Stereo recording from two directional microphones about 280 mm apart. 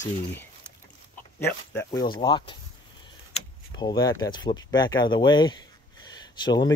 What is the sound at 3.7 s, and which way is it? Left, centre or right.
Speech, centre.